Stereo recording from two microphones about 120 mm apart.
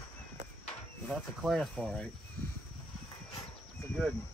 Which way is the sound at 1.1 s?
5° left (ahead or behind).